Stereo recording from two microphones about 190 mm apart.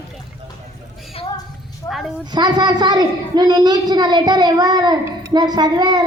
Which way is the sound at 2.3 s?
20° right (ahead or behind).